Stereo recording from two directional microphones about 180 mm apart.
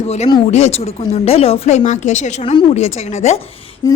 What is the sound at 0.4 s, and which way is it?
A woman's voice, 40° left (ahead or behind).